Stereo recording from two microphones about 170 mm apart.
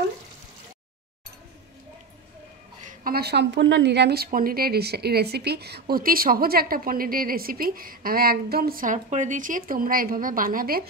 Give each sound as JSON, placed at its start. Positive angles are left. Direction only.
{"t": 3.0, "sound": "speech", "side_deg": -65}